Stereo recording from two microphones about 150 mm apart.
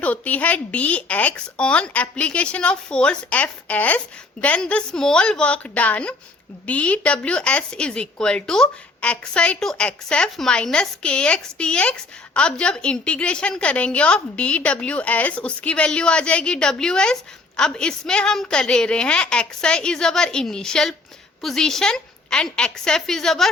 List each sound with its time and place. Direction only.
0.0 s a woman's voice: 10° left (ahead or behind)